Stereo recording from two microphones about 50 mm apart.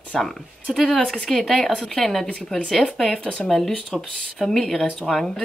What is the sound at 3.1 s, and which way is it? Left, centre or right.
Speech, left.